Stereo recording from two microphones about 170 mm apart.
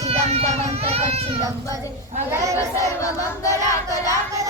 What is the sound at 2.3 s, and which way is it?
Speech, 20° right (ahead or behind).